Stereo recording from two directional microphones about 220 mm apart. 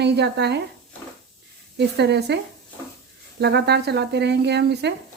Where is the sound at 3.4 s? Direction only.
50° right (ahead or behind).